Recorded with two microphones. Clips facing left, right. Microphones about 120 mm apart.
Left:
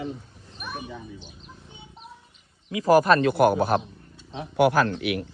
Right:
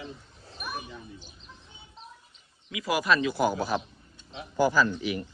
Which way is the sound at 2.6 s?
35° left (ahead or behind).